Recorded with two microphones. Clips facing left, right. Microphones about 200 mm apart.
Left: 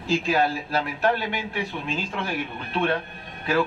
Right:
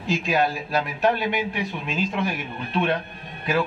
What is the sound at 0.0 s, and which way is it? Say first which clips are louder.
A man's voice: even; 15° right (ahead or behind).